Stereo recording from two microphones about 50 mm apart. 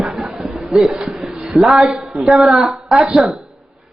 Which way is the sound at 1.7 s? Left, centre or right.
Centre.